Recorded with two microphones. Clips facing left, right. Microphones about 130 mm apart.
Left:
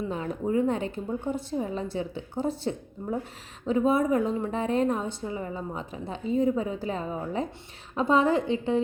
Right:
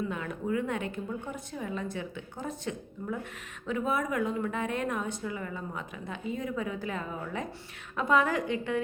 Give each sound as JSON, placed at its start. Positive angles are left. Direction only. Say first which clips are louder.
{"t": 0.1, "sound": "a woman's voice", "louder": "left 4 dB", "side_deg": 30}